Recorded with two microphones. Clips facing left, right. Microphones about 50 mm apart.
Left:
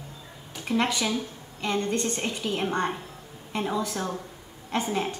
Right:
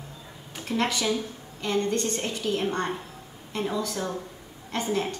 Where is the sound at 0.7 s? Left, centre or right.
Centre.